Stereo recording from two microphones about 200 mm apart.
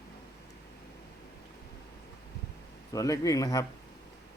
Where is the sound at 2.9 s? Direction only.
15° left (ahead or behind).